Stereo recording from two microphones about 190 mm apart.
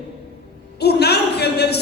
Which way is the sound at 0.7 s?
60° left (ahead or behind).